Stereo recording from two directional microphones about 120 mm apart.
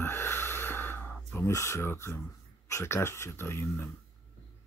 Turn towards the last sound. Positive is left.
turn(degrees=20)  # may be behind; listen again after turning